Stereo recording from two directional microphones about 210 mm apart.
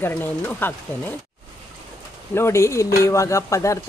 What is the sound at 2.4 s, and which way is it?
Speech, 15° left (ahead or behind).